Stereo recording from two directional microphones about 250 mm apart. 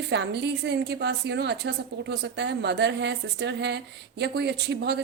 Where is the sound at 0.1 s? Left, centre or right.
Right.